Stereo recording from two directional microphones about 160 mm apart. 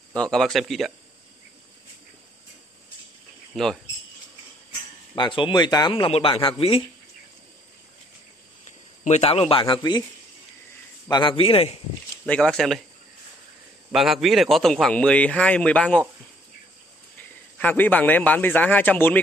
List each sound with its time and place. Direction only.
0.1 s a man's voice: 5° left (ahead or behind)
3.5 s a man's voice: centre (ahead or behind)
5.1 s a man's voice: 30° left (ahead or behind)
9.0 s a man's voice: 40° left (ahead or behind)
11.1 s a man's voice: 30° left (ahead or behind)
12.3 s a man's voice: 5° left (ahead or behind)
13.9 s a man's voice: centre (ahead or behind)
17.6 s a man's voice: 10° left (ahead or behind)